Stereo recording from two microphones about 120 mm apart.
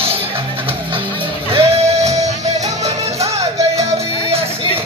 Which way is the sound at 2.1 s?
30° right (ahead or behind).